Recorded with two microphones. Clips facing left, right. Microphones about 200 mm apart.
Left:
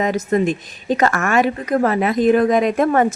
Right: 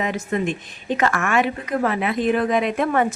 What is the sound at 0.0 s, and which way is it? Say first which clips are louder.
A woman's voice: left 6 dB; 40° left (ahead or behind).